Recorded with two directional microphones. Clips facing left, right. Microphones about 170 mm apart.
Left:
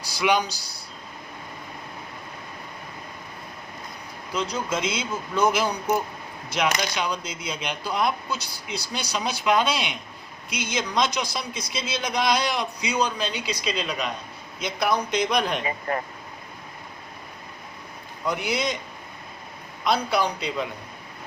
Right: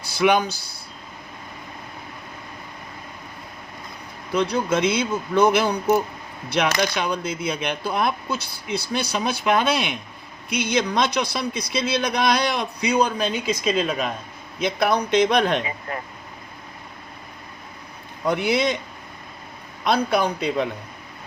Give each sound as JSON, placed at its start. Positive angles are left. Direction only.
{"t": 0.0, "sound": "speech", "side_deg": -55}
{"t": 4.3, "sound": "speech", "side_deg": -60}
{"t": 6.9, "sound": "speech", "side_deg": -55}
{"t": 18.3, "sound": "speech", "side_deg": -65}
{"t": 19.8, "sound": "speech", "side_deg": -55}